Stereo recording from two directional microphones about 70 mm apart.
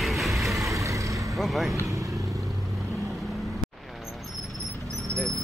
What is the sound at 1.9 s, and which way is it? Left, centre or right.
Vehicle, right.